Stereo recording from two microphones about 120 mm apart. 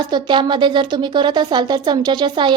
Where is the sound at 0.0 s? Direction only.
40° right (ahead or behind).